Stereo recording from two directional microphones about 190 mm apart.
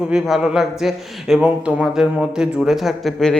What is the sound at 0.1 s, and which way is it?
Speech, centre (ahead or behind).